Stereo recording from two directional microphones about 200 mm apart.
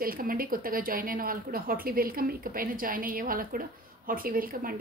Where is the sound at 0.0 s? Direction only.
45° right (ahead or behind).